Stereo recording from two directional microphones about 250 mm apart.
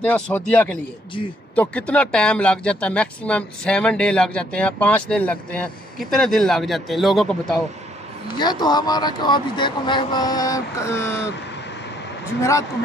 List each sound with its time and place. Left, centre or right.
0.1 s speech: centre
8.4 s speech: centre
12.4 s speech: centre